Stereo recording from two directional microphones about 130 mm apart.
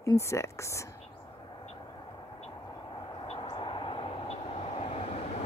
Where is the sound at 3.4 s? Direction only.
40° left (ahead or behind).